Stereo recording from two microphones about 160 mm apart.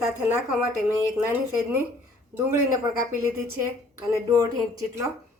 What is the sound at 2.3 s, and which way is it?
Speech, centre (ahead or behind).